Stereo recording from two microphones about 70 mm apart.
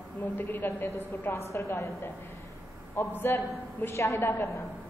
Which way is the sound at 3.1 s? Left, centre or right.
Left.